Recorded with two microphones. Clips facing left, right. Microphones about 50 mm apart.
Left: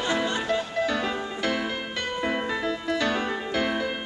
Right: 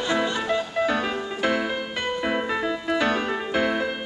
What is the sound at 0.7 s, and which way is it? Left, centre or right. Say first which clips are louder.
Music: right 2 dB; centre.